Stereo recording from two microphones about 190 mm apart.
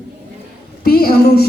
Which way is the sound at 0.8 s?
50° left (ahead or behind).